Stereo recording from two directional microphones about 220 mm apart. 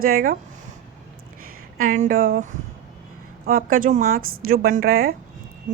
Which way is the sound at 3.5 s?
40° right (ahead or behind).